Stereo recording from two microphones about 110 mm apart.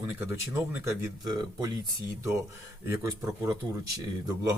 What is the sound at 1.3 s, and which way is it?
Speech, 40° right (ahead or behind).